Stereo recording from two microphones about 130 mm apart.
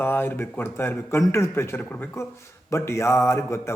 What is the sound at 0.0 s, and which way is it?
A man's voice, 15° left (ahead or behind).